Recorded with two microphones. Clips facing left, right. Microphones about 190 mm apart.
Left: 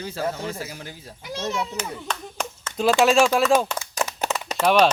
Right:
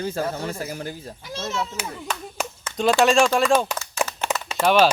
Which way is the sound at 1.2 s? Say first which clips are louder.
Left 2 dB; 15° left (ahead or behind).